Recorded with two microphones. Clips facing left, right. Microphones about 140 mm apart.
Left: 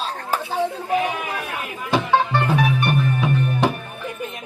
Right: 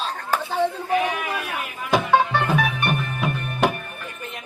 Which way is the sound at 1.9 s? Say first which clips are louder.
Even; centre (ahead or behind).